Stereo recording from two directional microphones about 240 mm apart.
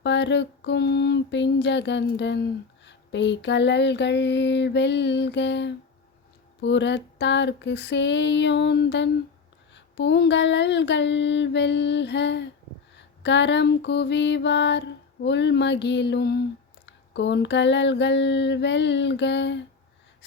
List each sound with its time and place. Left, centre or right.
0.0 s music: left